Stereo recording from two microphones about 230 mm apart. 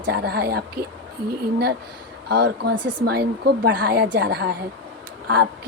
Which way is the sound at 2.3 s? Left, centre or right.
Right.